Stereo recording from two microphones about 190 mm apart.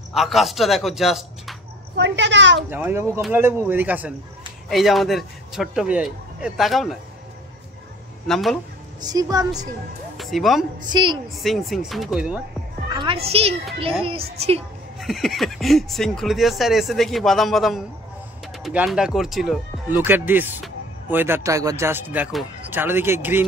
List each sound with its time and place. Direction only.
0.1 s speech: centre (ahead or behind)
2.0 s a woman's voice: 70° right (ahead or behind)
2.7 s speech: 10° right (ahead or behind)
8.3 s speech: centre (ahead or behind)
9.0 s a woman's voice: 20° right (ahead or behind)
10.1 s speech: centre (ahead or behind)
10.9 s a woman's voice: 25° right (ahead or behind)
11.3 s speech: centre (ahead or behind)
12.9 s a child's voice: 25° right (ahead or behind)
15.0 s speech: centre (ahead or behind)